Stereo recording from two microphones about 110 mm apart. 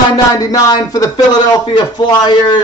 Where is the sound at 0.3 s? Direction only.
35° left (ahead or behind).